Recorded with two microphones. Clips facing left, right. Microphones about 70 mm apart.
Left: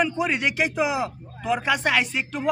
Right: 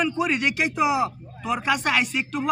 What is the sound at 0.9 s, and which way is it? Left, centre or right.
Speech, centre.